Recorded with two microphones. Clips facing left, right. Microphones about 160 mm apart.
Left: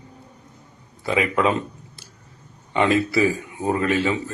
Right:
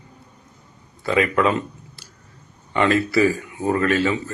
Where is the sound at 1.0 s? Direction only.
15° left (ahead or behind).